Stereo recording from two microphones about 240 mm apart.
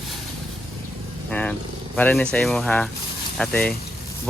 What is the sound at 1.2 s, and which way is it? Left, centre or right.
Vehicle, centre.